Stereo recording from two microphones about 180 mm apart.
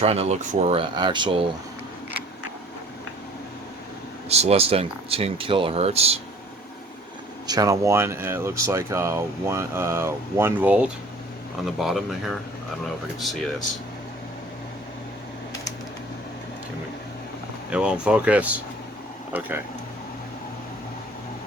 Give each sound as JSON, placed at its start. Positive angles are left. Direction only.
{"t": 0.0, "sound": "speech", "side_deg": -35}
{"t": 4.3, "sound": "speech", "side_deg": -35}
{"t": 7.4, "sound": "speech", "side_deg": -20}
{"t": 17.7, "sound": "speech", "side_deg": -5}